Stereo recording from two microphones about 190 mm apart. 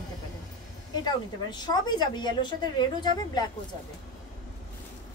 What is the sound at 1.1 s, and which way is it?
A woman's voice, 20° left (ahead or behind).